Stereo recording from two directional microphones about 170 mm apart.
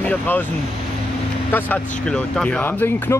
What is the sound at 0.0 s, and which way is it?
Speech, 10° left (ahead or behind).